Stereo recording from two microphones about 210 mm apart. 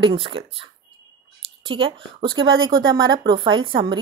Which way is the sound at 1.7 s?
25° right (ahead or behind).